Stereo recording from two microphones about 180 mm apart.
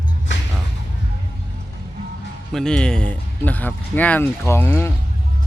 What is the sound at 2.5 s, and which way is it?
Speech, 5° left (ahead or behind).